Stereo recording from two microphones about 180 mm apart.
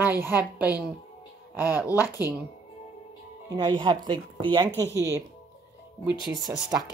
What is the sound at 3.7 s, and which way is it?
Speech, 25° right (ahead or behind).